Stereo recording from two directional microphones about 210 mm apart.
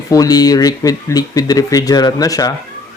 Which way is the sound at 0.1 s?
15° left (ahead or behind).